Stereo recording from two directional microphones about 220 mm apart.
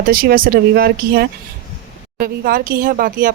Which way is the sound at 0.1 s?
40° right (ahead or behind).